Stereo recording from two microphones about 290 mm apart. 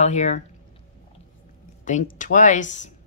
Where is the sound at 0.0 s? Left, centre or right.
Left.